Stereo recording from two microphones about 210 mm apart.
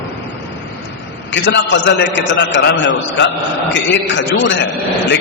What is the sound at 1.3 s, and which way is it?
A man's voice, 60° left (ahead or behind).